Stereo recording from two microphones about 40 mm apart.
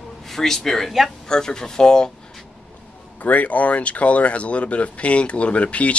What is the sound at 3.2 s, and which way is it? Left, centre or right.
Speech, left.